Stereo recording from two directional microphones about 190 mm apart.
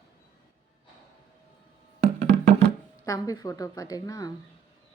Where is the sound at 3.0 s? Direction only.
20° left (ahead or behind).